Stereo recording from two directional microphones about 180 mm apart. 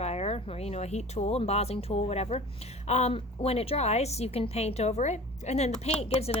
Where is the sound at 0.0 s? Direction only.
35° left (ahead or behind).